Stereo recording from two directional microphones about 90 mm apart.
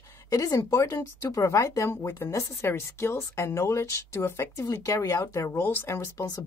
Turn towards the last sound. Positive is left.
turn(degrees=30)  # may be behind; listen again after turning